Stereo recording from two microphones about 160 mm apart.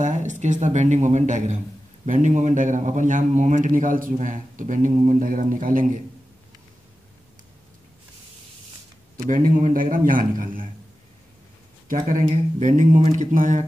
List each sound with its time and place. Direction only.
0.0 s a man's voice: 50° right (ahead or behind)
9.3 s a man's voice: 50° right (ahead or behind)
11.9 s a man's voice: 55° right (ahead or behind)